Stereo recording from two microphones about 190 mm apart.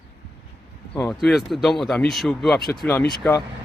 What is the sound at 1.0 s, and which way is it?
Speech, centre (ahead or behind).